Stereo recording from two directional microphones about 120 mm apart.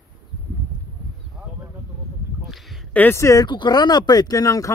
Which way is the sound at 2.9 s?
20° left (ahead or behind).